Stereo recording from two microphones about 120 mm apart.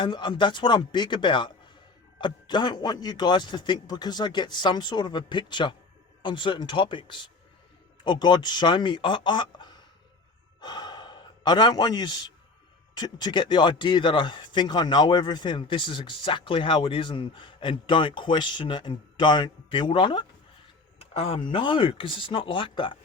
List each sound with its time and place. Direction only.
0.0 s a man's voice: 40° left (ahead or behind)
10.6 s sigh: 35° left (ahead or behind)
12.9 s speech: 35° left (ahead or behind)
21.0 s speech: 55° left (ahead or behind)